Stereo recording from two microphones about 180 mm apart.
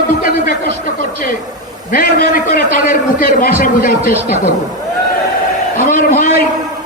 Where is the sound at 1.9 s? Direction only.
55° left (ahead or behind).